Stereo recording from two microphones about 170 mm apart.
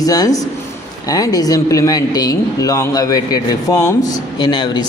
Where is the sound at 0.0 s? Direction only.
20° left (ahead or behind).